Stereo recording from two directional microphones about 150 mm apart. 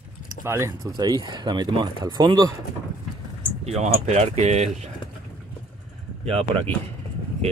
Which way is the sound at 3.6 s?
45° right (ahead or behind).